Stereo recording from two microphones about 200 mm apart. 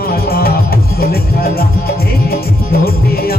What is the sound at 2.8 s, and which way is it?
Music, 50° left (ahead or behind).